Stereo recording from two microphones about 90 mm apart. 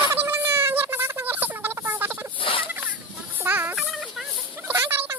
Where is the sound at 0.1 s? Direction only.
25° right (ahead or behind).